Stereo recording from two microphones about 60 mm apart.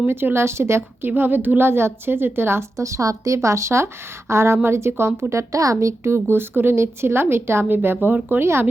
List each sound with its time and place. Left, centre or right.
0.1 s a woman's voice: right
2.7 s a woman's voice: right
5.3 s a woman's voice: right
5.7 s a woman's voice: right
8.4 s a woman's voice: right